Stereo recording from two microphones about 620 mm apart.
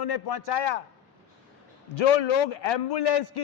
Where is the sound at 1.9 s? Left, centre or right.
Left.